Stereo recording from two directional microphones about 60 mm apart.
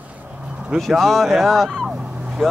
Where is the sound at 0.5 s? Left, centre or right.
Centre.